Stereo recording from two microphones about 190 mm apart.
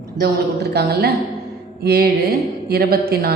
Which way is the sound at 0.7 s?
60° right (ahead or behind).